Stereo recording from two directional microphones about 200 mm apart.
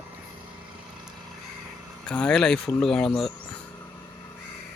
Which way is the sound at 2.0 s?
5° left (ahead or behind).